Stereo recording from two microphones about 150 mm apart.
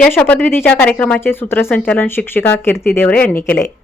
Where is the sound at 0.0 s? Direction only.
10° left (ahead or behind).